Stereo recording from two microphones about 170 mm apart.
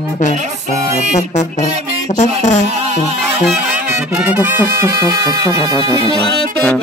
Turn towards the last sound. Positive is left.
turn(degrees=-20)  # may be behind; listen again after turning